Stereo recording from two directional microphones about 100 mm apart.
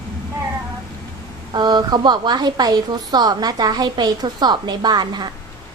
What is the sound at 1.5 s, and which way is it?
A woman's voice, 45° right (ahead or behind).